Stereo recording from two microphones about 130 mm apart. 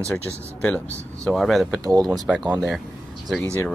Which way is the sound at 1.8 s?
30° right (ahead or behind).